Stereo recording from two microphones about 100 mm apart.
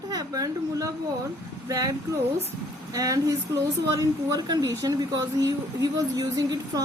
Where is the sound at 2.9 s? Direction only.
35° right (ahead or behind).